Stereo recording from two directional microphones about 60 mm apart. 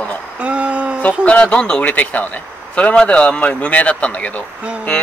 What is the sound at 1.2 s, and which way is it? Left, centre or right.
Speech, centre.